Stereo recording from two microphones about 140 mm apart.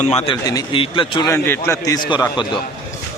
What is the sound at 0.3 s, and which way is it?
Speech, 30° left (ahead or behind).